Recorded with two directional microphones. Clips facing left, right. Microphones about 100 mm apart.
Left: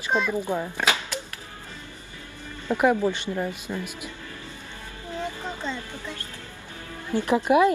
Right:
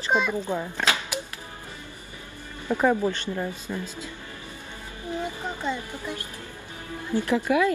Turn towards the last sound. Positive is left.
turn(degrees=25)  # may be behind; listen again after turning